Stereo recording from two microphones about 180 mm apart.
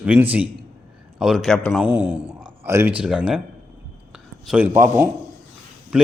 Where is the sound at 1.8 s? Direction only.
10° right (ahead or behind).